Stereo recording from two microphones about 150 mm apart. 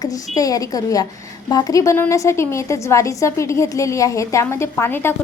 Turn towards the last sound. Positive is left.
turn(degrees=15)  # may be behind; listen again after turning